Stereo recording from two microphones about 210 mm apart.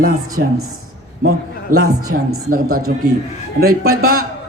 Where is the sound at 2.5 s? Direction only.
45° right (ahead or behind).